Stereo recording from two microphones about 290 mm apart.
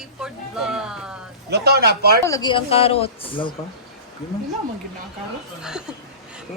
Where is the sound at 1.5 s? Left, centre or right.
Right.